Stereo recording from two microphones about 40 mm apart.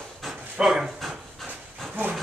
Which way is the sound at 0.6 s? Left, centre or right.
Centre.